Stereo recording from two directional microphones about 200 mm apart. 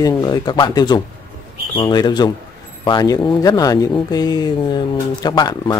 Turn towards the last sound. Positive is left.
turn(degrees=20)  # may be behind; listen again after turning